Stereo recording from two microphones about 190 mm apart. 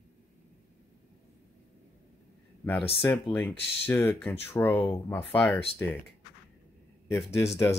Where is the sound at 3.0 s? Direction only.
10° left (ahead or behind).